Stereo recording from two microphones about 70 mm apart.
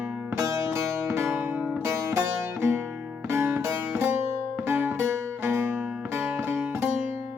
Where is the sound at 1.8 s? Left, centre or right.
Right.